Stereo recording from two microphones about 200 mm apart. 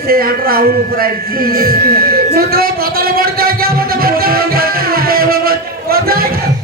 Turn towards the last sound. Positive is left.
turn(degrees=-50)  # may be behind; listen again after turning